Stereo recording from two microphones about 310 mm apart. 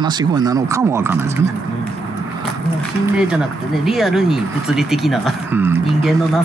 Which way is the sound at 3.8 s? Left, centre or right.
Centre.